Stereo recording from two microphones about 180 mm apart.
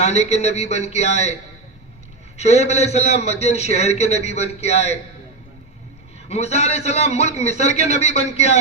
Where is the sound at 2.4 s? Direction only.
40° left (ahead or behind).